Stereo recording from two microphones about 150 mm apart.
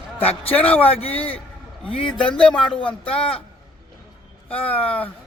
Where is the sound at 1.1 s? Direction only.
10° left (ahead or behind).